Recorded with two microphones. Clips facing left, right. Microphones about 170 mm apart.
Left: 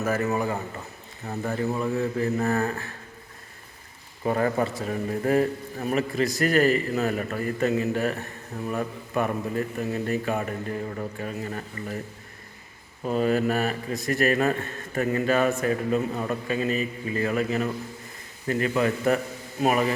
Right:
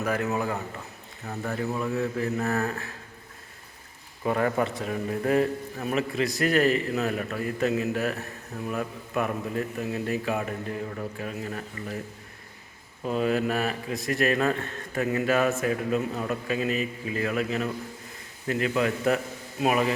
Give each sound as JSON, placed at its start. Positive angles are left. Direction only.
{"t": 0.0, "sound": "a man's voice", "side_deg": 0}
{"t": 1.2, "sound": "speech", "side_deg": 15}
{"t": 1.5, "sound": "a man's voice", "side_deg": 0}
{"t": 4.4, "sound": "a man's voice", "side_deg": 0}
{"t": 13.1, "sound": "a man's voice", "side_deg": 0}